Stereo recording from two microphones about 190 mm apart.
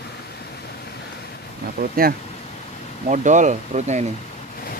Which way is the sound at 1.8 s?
45° right (ahead or behind).